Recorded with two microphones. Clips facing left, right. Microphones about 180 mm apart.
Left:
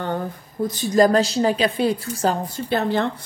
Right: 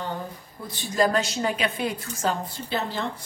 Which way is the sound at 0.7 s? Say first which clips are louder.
Left 7 dB; 40° left (ahead or behind).